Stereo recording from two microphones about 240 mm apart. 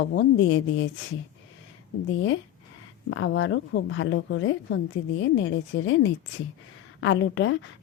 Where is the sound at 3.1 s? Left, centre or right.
Left.